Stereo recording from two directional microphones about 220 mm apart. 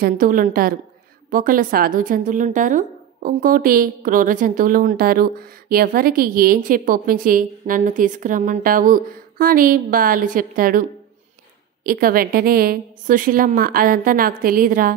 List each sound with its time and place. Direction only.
0.0 s a woman's voice: 40° right (ahead or behind)